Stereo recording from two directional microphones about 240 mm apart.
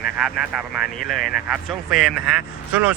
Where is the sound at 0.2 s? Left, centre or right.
Centre.